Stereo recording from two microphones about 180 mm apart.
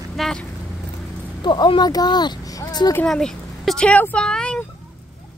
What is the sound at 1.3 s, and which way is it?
Speech, 25° left (ahead or behind).